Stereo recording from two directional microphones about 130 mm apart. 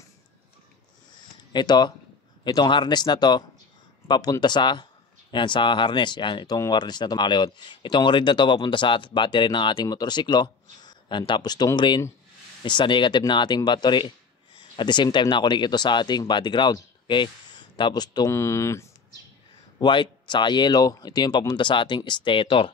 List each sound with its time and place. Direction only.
1.5 s speech: 35° left (ahead or behind)
18.3 s speech: 20° left (ahead or behind)
19.8 s speech: 35° left (ahead or behind)